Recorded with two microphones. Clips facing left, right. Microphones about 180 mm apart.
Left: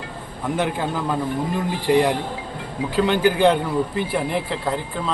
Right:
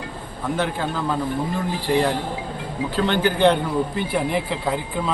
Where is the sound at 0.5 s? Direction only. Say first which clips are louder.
Left 1 dB; 15° left (ahead or behind).